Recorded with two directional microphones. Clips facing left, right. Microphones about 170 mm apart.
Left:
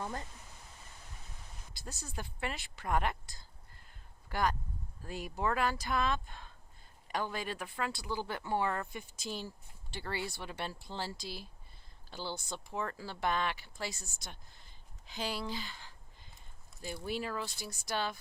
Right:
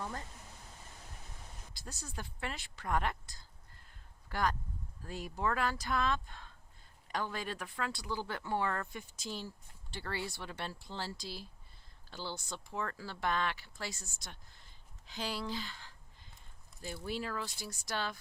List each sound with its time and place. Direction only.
2.1 s speech: 10° left (ahead or behind)
4.3 s speech: 10° left (ahead or behind)